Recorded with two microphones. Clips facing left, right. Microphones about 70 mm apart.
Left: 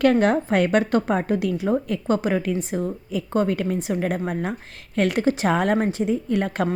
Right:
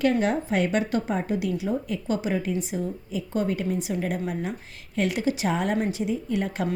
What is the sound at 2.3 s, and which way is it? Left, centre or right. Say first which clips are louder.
Speech: left 4 dB; left.